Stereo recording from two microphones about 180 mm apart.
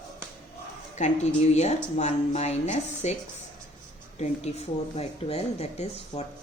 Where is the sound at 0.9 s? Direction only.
40° left (ahead or behind).